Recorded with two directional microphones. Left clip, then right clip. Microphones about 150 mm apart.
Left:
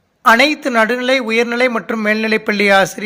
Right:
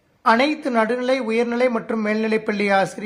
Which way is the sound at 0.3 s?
15° left (ahead or behind).